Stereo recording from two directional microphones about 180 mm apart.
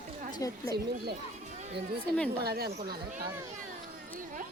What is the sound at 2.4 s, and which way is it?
Speech, 60° right (ahead or behind).